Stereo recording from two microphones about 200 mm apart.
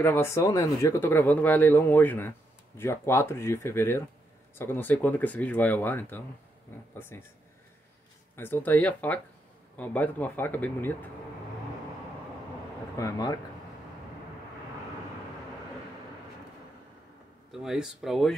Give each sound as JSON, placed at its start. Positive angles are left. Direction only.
{"t": 0.0, "sound": "speech", "side_deg": 10}
{"t": 8.4, "sound": "speech", "side_deg": 10}
{"t": 12.9, "sound": "speech", "side_deg": 15}
{"t": 17.5, "sound": "speech", "side_deg": 0}